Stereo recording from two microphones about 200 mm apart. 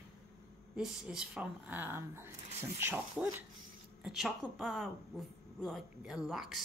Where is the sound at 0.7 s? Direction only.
5° right (ahead or behind).